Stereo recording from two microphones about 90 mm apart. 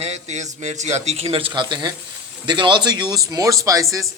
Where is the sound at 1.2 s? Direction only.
80° right; by 4.0 s 35° right (ahead or behind).